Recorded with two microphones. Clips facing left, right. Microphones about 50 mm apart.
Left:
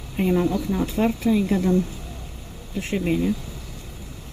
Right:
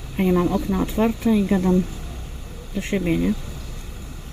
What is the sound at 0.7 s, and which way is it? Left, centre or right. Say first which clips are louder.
Speech: right 1 dB; right.